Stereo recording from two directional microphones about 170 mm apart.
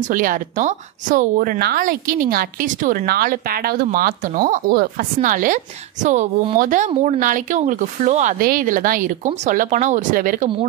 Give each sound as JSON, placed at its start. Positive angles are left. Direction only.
{"t": 0.0, "sound": "speech", "side_deg": -50}